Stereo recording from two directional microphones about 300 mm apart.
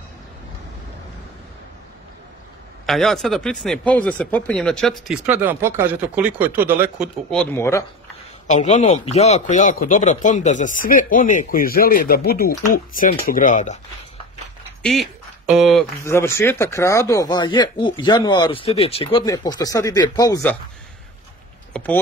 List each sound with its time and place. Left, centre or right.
2.9 s speech: centre
8.5 s speech: left
14.8 s speech: centre
21.7 s speech: centre